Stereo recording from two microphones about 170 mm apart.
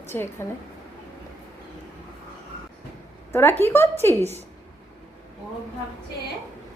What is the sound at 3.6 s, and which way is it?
Speech, 15° left (ahead or behind).